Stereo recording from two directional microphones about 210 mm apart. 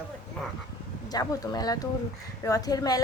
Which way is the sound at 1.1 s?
20° left (ahead or behind).